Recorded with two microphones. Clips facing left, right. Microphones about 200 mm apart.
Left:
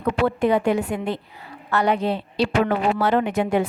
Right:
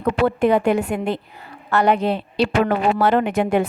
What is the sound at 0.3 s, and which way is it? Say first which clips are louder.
A woman's voice: right 3 dB; 50° right (ahead or behind).